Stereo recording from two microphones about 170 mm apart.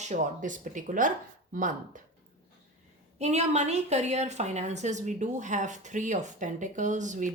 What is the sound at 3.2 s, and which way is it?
A woman's voice, 40° right (ahead or behind).